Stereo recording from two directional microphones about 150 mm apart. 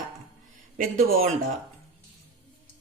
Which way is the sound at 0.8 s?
75° right (ahead or behind).